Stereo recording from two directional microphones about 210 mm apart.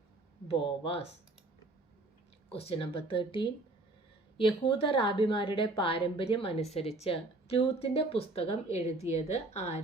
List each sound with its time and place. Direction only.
0.4 s a woman's voice: 25° left (ahead or behind)
2.5 s a woman's voice: 25° left (ahead or behind)